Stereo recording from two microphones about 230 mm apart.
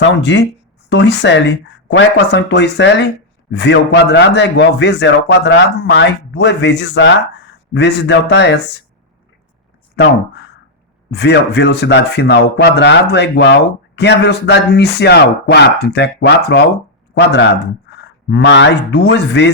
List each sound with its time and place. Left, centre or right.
0.0 s speech: left
10.0 s speech: left